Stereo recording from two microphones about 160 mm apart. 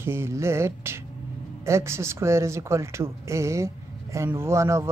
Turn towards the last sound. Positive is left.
turn(degrees=-20)  # may be behind; listen again after turning